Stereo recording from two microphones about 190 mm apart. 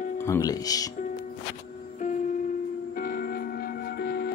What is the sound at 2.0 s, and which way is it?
Music, 40° left (ahead or behind).